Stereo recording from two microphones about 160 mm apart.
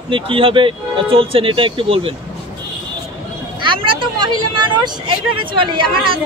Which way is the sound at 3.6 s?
30° right (ahead or behind).